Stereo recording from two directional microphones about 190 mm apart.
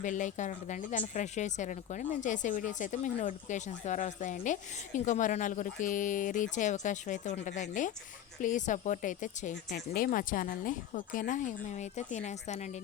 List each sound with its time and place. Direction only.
0.0 s speech: 40° left (ahead or behind)